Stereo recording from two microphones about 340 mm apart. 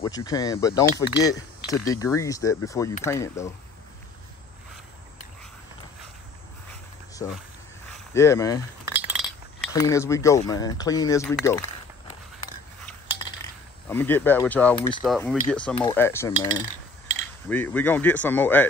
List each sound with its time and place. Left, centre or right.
0.0 s speech: centre
8.1 s speech: centre
8.8 s chink: centre
9.7 s speech: centre
13.8 s speech: centre
16.3 s cutlery: centre
17.5 s speech: centre